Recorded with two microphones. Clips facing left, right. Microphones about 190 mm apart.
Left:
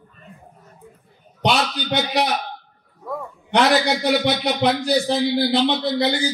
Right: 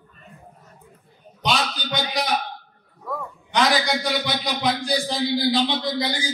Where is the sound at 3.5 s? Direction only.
60° left (ahead or behind).